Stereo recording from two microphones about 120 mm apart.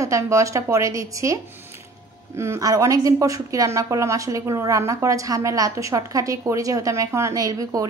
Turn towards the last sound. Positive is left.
turn(degrees=-30)  # may be behind; listen again after turning